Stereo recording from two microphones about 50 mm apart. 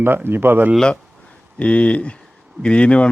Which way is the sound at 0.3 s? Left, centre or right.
Right.